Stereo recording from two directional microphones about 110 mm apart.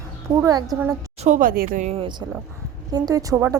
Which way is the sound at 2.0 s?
45° right (ahead or behind).